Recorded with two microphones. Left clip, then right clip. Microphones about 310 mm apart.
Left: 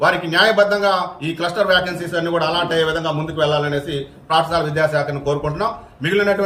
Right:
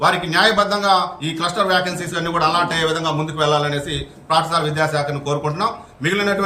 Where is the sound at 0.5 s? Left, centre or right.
Right.